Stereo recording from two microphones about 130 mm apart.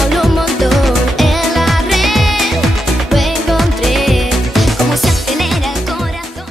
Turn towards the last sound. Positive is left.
turn(degrees=0)  # may be behind; listen again after turning